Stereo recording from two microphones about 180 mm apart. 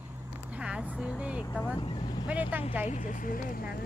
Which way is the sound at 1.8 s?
30° left (ahead or behind).